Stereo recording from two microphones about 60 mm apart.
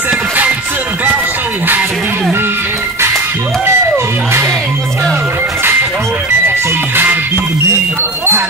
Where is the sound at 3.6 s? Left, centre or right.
Right.